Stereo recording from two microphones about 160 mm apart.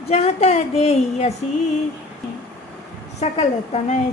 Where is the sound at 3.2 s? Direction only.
45° left (ahead or behind).